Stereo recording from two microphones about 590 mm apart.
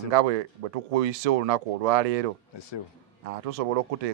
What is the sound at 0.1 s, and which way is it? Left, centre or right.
Speech, right.